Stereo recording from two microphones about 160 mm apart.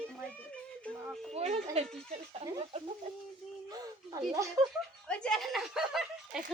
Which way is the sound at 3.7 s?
25° right (ahead or behind).